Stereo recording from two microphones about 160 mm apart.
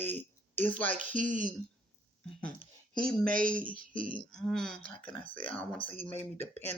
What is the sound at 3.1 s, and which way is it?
Speech, 5° left (ahead or behind).